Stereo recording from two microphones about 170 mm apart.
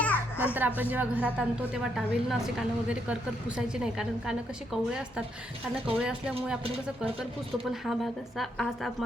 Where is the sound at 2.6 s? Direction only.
5° right (ahead or behind).